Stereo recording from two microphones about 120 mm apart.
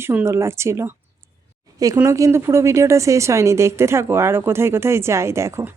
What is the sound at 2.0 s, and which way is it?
Speech, 25° right (ahead or behind).